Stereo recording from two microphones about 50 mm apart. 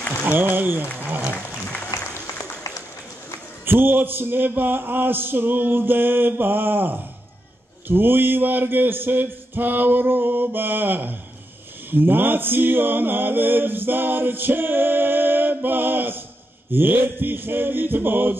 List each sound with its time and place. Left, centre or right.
0.2 s speech: right
3.6 s mantra: right